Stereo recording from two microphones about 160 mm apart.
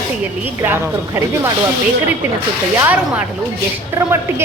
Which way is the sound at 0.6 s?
15° right (ahead or behind).